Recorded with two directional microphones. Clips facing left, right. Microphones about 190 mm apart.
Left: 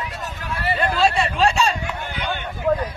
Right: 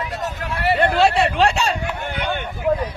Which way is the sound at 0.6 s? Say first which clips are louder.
Right 4 dB; 65° right (ahead or behind).